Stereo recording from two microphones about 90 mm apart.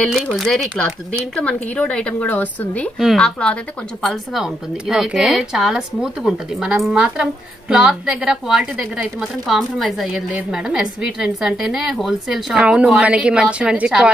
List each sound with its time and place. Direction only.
0.5 s a woman's voice: 5° left (ahead or behind)